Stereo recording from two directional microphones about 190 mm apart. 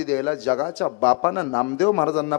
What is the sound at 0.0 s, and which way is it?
A man's voice, 10° left (ahead or behind).